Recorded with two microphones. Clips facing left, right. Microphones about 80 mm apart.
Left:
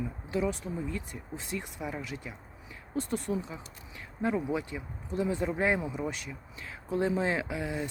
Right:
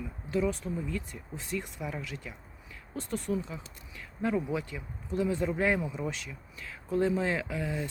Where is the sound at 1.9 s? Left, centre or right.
Centre.